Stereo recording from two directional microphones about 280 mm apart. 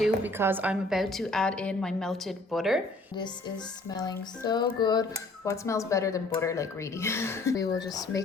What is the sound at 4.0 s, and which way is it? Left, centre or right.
Speech, centre.